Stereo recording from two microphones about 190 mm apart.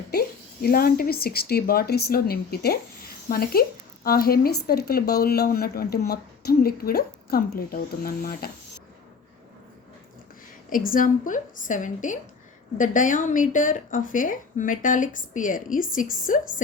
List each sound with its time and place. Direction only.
0.1 s a woman's voice: 55° left (ahead or behind)
10.7 s a woman's voice: 45° left (ahead or behind)